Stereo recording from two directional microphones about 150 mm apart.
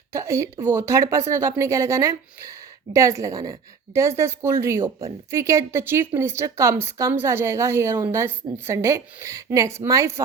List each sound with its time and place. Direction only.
0.1 s a woman's voice: 20° right (ahead or behind)